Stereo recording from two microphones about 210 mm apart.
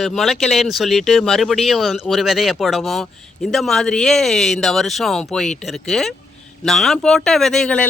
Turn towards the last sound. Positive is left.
turn(degrees=5)  # may be behind; listen again after turning